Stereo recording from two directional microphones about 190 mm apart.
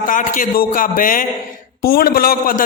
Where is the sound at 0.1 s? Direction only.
45° left (ahead or behind).